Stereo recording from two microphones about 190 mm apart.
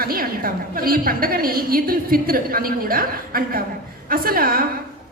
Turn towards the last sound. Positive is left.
turn(degrees=-50)  # may be behind; listen again after turning